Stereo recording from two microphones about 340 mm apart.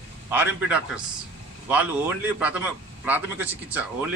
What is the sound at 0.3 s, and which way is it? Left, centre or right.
Speech, centre.